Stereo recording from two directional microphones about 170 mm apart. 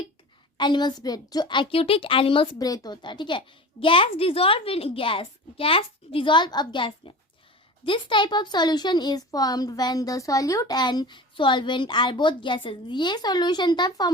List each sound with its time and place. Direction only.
0.5 s a woman's voice: 25° left (ahead or behind)